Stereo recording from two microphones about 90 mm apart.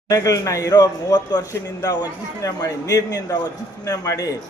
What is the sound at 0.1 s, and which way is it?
A man's voice, 40° left (ahead or behind).